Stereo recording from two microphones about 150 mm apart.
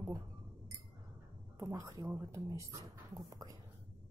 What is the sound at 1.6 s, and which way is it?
Speech, 20° right (ahead or behind).